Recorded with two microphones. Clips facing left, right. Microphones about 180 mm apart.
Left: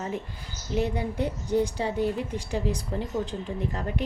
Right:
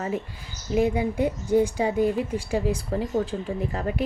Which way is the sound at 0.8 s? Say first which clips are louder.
Right 5 dB; 10° right (ahead or behind).